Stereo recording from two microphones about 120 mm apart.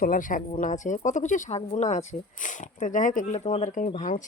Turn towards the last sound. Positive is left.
turn(degrees=90)